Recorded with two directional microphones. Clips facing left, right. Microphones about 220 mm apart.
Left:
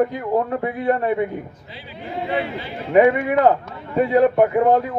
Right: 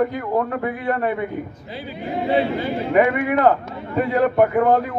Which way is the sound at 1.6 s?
45° right (ahead or behind).